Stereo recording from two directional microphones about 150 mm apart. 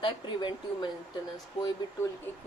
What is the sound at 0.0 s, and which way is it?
Speech, 30° left (ahead or behind).